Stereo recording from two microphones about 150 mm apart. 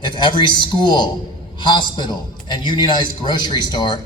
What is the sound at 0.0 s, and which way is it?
A man's voice, 30° left (ahead or behind).